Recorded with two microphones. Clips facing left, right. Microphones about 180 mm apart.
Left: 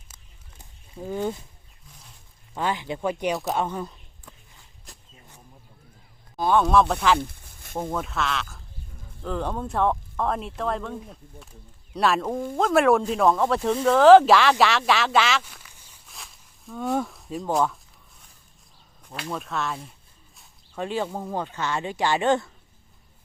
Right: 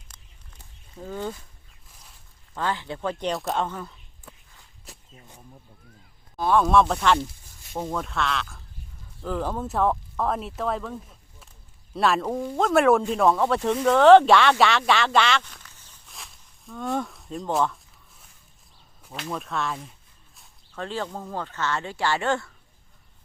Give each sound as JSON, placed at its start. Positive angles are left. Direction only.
{"t": 0.1, "sound": "a sound", "side_deg": 5}
{"t": 2.6, "sound": "speech", "side_deg": 15}
{"t": 3.6, "sound": "speech", "side_deg": 15}
{"t": 6.3, "sound": "speech", "side_deg": 0}
{"t": 7.2, "sound": "a sound", "side_deg": 55}
{"t": 7.8, "sound": "speech", "side_deg": 0}
{"t": 11.9, "sound": "speech", "side_deg": 0}
{"t": 14.6, "sound": "a sound", "side_deg": 0}
{"t": 19.1, "sound": "speech", "side_deg": 0}
{"t": 20.7, "sound": "speech", "side_deg": 15}